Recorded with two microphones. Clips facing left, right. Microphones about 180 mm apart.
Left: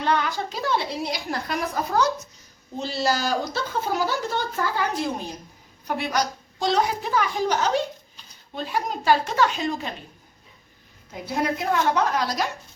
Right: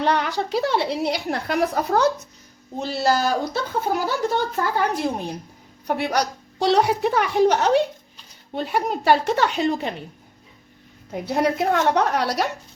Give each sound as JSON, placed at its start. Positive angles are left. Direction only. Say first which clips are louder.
{"t": 0.0, "sound": "a woman's voice", "louder": "right 2 dB", "side_deg": -70}
{"t": 11.1, "sound": "a woman's voice", "louder": "right 4 dB", "side_deg": -65}